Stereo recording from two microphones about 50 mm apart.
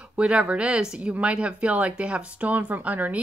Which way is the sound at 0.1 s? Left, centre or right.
Right.